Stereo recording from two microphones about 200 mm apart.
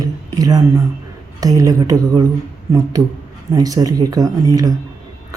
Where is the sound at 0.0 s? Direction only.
20° right (ahead or behind).